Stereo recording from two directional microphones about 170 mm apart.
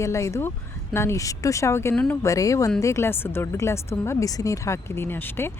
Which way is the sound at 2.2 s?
20° left (ahead or behind).